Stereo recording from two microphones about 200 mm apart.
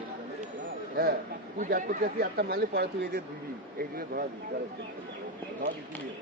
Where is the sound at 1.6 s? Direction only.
45° right (ahead or behind).